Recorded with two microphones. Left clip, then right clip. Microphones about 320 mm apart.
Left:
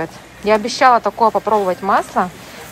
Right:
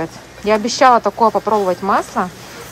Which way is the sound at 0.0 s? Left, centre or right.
Centre.